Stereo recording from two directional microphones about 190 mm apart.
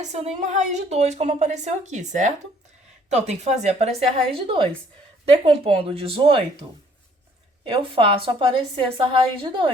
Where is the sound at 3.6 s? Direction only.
35° right (ahead or behind).